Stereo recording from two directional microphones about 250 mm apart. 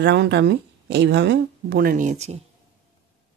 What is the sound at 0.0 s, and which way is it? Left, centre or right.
Speech, right.